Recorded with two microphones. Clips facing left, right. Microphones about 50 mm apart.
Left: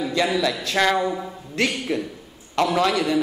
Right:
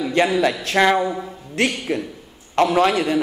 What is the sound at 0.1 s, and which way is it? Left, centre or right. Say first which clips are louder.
Speech: right 5 dB; right.